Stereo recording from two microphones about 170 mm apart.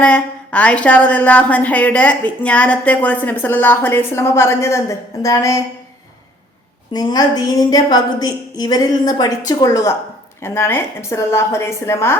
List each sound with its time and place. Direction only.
0.0 s a woman's voice: 5° left (ahead or behind)
6.9 s a woman's voice: 20° left (ahead or behind)